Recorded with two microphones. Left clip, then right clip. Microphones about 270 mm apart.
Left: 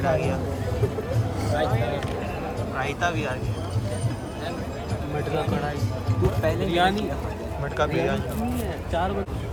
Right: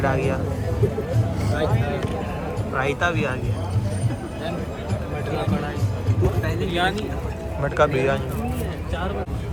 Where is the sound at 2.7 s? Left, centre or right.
Centre.